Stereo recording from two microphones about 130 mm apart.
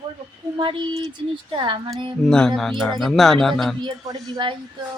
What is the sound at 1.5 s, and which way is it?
Speech, 40° right (ahead or behind).